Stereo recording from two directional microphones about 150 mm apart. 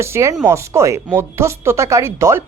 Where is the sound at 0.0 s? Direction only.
20° right (ahead or behind).